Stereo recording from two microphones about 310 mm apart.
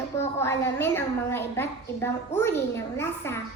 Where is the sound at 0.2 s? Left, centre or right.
Centre.